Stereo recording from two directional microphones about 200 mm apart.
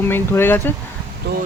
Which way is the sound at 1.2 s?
55° right (ahead or behind).